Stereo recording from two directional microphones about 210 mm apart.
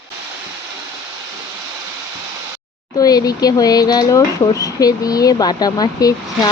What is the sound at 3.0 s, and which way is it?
Speech, 15° left (ahead or behind).